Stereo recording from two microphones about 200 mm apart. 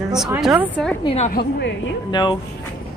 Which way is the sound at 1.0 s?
25° left (ahead or behind).